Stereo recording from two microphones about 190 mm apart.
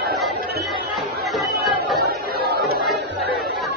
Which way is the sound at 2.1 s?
55° right (ahead or behind).